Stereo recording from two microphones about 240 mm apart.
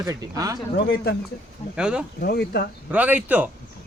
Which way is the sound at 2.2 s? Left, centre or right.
Left.